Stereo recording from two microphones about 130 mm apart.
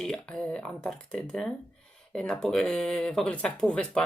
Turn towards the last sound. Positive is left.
turn(degrees=5)  # may be behind; listen again after turning